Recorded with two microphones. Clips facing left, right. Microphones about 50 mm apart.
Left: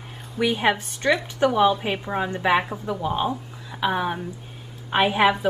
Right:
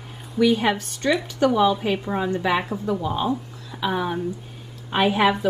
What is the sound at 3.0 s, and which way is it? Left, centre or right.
Speech, left.